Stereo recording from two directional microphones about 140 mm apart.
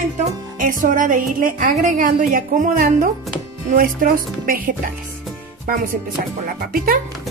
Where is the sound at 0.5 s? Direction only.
75° right (ahead or behind); by 4.7 s 90° right.